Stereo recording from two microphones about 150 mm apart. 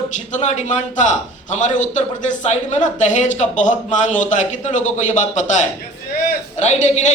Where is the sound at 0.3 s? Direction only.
55° left (ahead or behind).